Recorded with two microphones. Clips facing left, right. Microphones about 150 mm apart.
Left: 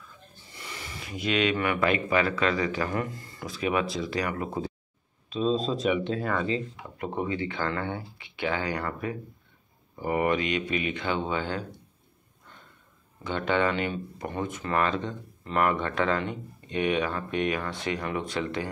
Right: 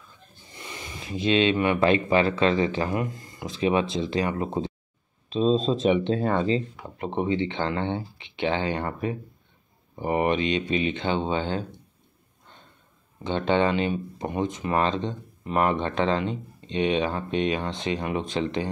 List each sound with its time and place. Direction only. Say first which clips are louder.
0.6 s speech: right 2 dB; 20° right (ahead or behind)
13.2 s speech: right 3 dB; 25° right (ahead or behind)